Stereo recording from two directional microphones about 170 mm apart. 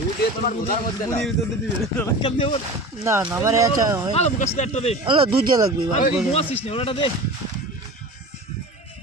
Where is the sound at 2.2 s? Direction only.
30° left (ahead or behind).